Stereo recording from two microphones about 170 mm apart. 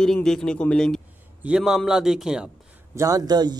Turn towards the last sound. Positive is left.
turn(degrees=-25)  # may be behind; listen again after turning